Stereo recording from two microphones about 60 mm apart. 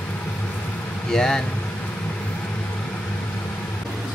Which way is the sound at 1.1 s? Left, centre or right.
Centre.